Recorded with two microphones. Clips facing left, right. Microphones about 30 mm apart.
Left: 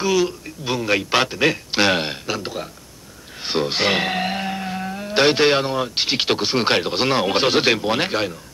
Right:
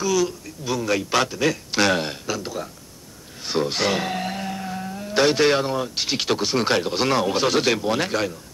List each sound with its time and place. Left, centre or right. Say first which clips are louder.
0.0 s speech: left 2 dB; left